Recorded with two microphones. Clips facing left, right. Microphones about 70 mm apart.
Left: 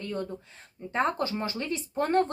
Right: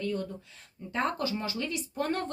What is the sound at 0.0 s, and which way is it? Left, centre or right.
Speech, left.